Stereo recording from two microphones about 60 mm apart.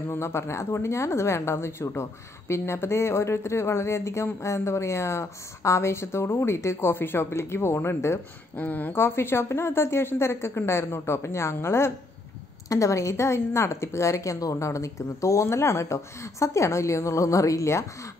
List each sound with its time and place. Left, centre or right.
0.1 s speech: left
6.9 s speech: left
8.5 s speech: left
8.9 s speech: left
12.6 s a woman's voice: left